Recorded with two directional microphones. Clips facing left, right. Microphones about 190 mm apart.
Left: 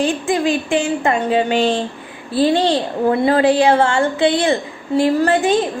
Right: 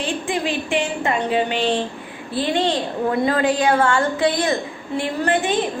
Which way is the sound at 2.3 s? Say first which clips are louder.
Left 5 dB; 35° left (ahead or behind).